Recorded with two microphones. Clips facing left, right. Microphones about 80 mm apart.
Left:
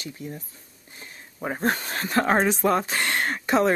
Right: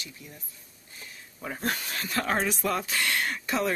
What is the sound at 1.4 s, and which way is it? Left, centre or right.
Speech, left.